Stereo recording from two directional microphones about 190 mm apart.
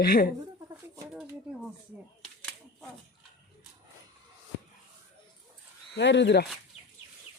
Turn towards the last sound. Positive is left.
turn(degrees=65)  # may be behind; listen again after turning